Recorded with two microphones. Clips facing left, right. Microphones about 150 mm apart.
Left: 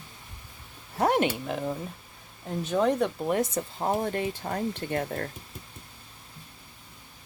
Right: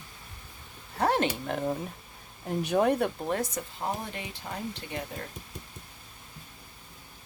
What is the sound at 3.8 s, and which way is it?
Speech, 50° left (ahead or behind).